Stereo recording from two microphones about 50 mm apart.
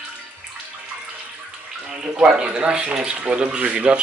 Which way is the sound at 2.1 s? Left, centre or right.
Right.